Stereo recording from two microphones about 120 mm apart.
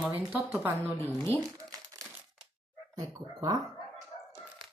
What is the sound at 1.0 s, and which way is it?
Speech, 20° left (ahead or behind).